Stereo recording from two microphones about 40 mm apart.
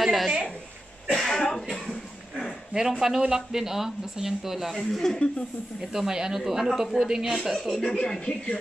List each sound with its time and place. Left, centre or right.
0.0 s a woman's voice: centre
1.1 s speech: centre
2.7 s speech: centre
4.7 s speech: centre
5.8 s speech: centre
7.4 s a woman's voice: centre
7.8 s a woman's voice: centre